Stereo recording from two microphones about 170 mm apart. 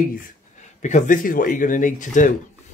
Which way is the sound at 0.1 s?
50° left (ahead or behind).